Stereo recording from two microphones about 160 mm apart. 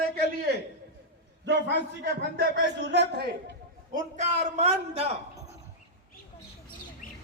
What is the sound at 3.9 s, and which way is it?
A man's voice, 45° right (ahead or behind).